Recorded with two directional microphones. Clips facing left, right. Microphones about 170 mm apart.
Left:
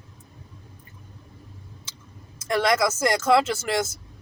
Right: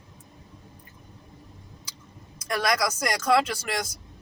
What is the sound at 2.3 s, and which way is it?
Speech, 25° left (ahead or behind).